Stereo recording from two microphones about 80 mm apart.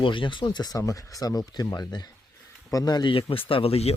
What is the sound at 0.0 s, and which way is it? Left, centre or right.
Speech, left.